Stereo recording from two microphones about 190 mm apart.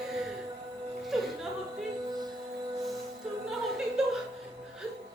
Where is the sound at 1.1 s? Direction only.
Centre (ahead or behind).